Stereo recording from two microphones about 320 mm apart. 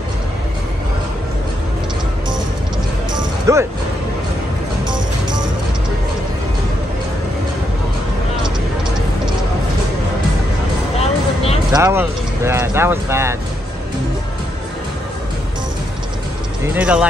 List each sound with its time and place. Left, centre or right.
3.2 s music: centre
4.8 s music: centre
11.0 s a sound: centre
11.7 s speech: centre
16.7 s speech: centre